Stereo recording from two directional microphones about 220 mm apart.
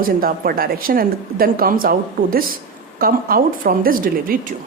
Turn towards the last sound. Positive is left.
turn(degrees=-40)  # may be behind; listen again after turning